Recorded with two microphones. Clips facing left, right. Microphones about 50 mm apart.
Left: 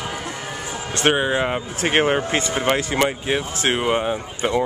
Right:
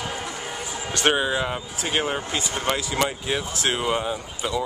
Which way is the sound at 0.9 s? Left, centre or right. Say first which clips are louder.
Left 3 dB; left.